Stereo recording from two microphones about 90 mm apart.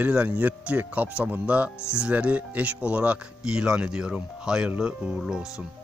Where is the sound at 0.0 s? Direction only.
15° right (ahead or behind).